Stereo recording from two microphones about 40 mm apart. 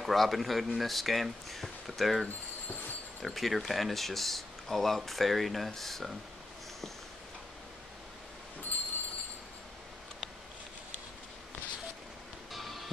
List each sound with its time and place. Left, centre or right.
0.0 s speech: centre
8.7 s train: left
12.5 s music: centre